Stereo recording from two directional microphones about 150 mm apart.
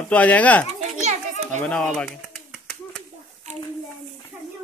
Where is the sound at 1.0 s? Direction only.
50° right (ahead or behind).